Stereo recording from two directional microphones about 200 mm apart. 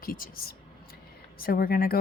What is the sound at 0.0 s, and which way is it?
A woman's voice, 45° left (ahead or behind).